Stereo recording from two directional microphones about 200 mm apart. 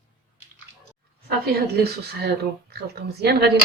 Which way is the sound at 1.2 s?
50° right (ahead or behind).